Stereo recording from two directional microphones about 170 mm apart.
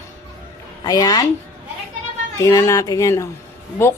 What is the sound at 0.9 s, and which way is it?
Speech, 20° left (ahead or behind).